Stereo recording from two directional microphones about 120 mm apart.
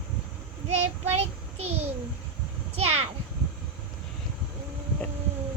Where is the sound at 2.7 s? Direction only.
60° right (ahead or behind).